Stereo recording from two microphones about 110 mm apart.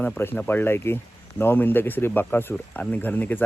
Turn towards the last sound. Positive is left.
turn(degrees=15)  # may be behind; listen again after turning